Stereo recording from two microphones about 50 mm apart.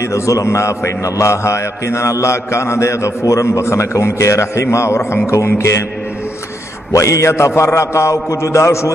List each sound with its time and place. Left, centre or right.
0.0 s a man's voice: left
7.0 s a man's voice: left